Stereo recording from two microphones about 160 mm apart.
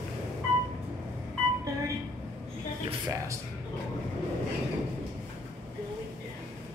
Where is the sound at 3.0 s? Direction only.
20° right (ahead or behind).